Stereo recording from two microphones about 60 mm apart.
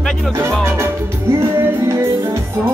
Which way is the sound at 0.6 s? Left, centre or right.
Right.